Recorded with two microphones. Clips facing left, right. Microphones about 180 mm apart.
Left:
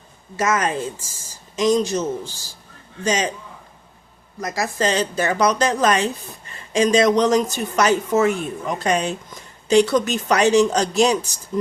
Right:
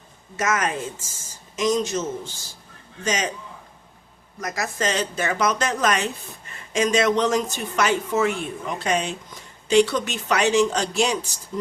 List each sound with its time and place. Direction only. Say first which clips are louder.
0.3 s speech: left 3 dB; 30° left (ahead or behind)
4.4 s speech: left 4 dB; 30° left (ahead or behind)